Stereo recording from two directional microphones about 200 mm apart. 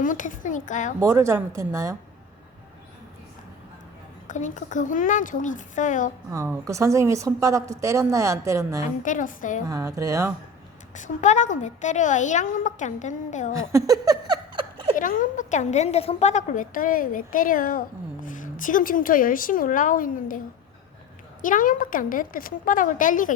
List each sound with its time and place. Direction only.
0.0 s a woman's voice: 40° left (ahead or behind)
0.9 s a woman's voice: 15° right (ahead or behind)
4.3 s a woman's voice: 40° left (ahead or behind)
6.3 s a woman's voice: 15° right (ahead or behind)
9.0 s a woman's voice: 40° left (ahead or behind)
9.6 s a woman's voice: 15° right (ahead or behind)
10.9 s a woman's voice: 40° left (ahead or behind)
13.7 s a sound: 15° right (ahead or behind)
14.9 s a woman's voice: 40° left (ahead or behind)
21.4 s a woman's voice: 40° left (ahead or behind)